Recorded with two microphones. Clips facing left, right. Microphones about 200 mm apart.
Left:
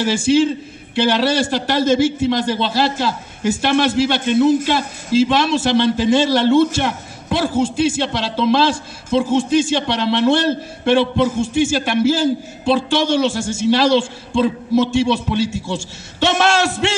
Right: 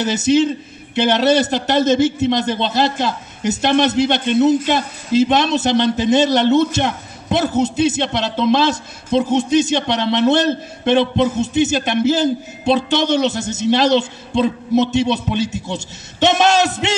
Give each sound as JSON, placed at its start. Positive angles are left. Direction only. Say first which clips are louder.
{"t": 0.0, "sound": "a man's voice", "louder": "even", "side_deg": -20}